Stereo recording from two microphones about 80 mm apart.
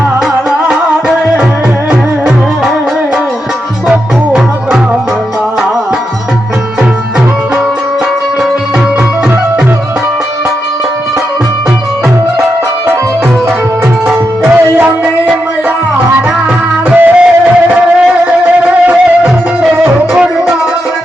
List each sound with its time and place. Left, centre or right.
0.7 s music: centre
3.8 s music: centre
14.4 s music: right
16.9 s music: centre